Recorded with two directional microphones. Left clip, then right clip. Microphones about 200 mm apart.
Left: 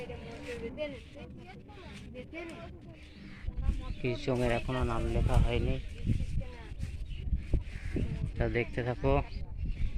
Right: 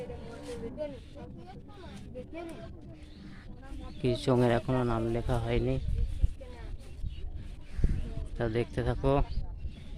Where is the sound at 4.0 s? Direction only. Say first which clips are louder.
Right 5 dB; 25° right (ahead or behind).